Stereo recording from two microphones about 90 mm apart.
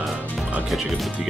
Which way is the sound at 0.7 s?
Centre (ahead or behind).